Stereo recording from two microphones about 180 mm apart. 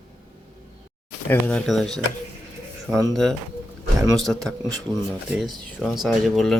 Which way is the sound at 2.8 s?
15° right (ahead or behind).